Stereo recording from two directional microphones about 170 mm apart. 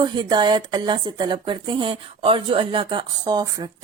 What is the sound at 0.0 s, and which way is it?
Speech, 25° right (ahead or behind).